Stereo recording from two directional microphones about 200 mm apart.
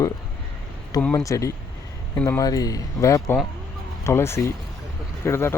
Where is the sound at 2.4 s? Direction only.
20° left (ahead or behind).